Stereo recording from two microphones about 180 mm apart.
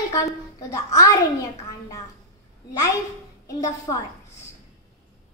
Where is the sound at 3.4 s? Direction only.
20° left (ahead or behind).